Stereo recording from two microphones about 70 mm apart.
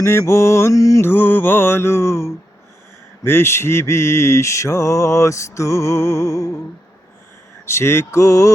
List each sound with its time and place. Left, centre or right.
0.0 s mantra: left
1.0 s mantra: left
7.6 s mantra: left